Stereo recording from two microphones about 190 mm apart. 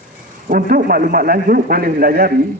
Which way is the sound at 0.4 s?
45° right (ahead or behind).